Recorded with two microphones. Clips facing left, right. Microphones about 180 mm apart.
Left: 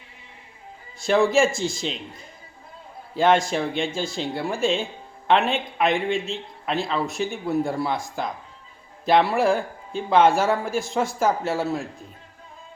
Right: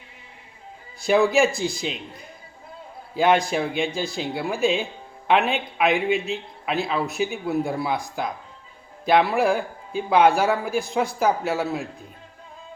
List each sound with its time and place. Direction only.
0.9 s a man's voice: centre (ahead or behind)
3.2 s a man's voice: centre (ahead or behind)